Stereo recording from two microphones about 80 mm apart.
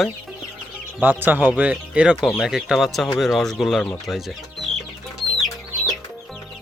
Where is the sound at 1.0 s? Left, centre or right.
Right; by 3.9 s centre.